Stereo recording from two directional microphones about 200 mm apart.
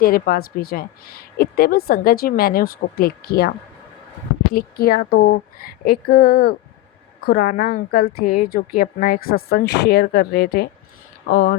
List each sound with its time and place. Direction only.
0.0 s a woman's voice: 50° left (ahead or behind)
4.5 s a woman's voice: 45° left (ahead or behind)